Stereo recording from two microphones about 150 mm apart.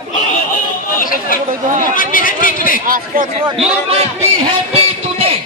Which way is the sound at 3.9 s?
45° right (ahead or behind).